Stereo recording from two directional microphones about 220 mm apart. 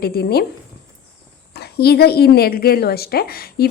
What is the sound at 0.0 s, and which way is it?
Speech, 45° left (ahead or behind).